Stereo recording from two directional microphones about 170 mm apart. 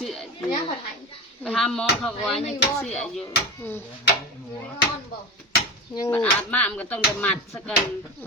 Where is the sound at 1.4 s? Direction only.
Centre (ahead or behind).